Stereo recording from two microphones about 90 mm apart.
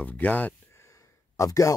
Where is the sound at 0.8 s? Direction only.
35° left (ahead or behind).